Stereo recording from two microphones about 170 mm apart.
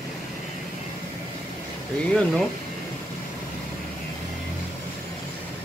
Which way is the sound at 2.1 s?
5° left (ahead or behind).